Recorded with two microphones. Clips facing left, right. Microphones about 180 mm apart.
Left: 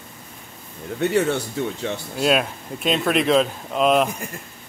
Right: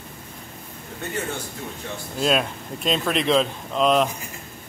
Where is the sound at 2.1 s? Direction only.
5° left (ahead or behind).